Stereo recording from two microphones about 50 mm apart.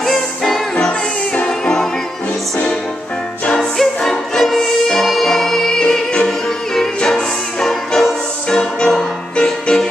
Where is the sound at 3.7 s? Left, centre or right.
Centre.